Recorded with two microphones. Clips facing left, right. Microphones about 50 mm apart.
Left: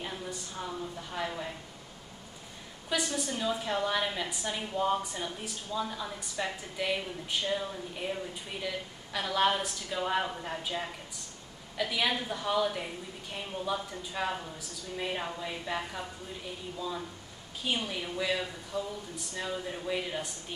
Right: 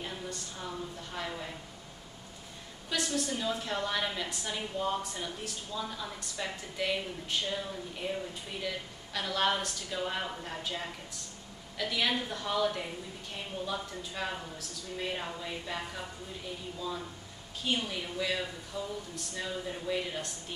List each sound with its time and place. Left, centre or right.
0.0 s a woman's voice: centre
2.9 s a woman's voice: centre
17.6 s a woman's voice: centre